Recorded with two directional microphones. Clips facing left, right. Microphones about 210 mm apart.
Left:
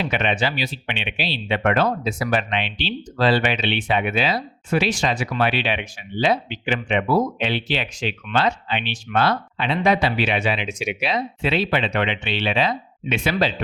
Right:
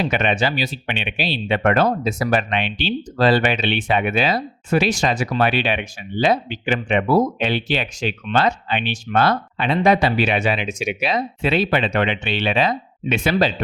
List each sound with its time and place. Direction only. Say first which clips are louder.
0.0 s speech: right 3 dB; 45° right (ahead or behind)